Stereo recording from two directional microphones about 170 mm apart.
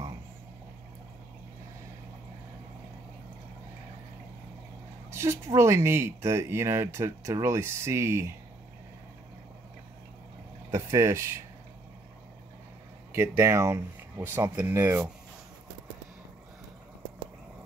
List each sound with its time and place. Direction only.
5.1 s speech: 15° right (ahead or behind)
10.7 s speech: 15° right (ahead or behind)
13.1 s speech: 15° right (ahead or behind)